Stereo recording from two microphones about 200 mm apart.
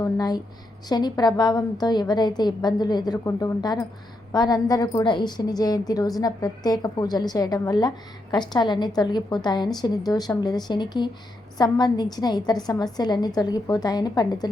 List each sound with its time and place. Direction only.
0.0 s a woman's voice: 20° left (ahead or behind)